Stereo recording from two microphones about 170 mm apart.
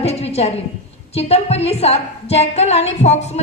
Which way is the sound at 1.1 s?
35° left (ahead or behind).